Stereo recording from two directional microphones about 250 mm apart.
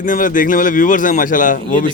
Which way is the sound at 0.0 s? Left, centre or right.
Left.